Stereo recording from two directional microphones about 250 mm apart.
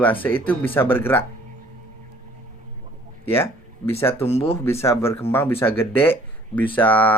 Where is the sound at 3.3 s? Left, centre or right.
Centre.